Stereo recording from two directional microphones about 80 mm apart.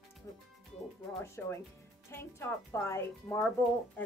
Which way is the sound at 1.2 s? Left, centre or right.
Left.